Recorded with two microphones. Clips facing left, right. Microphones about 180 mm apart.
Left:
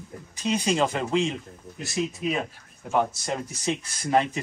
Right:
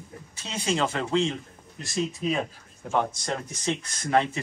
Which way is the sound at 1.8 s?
5° left (ahead or behind).